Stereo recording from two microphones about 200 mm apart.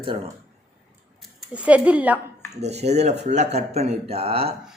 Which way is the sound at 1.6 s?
5° right (ahead or behind).